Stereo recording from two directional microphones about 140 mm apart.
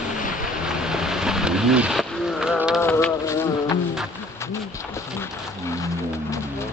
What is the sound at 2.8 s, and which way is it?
Insect, 15° left (ahead or behind).